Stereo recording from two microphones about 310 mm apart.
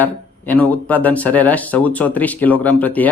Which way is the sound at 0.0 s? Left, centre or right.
Centre.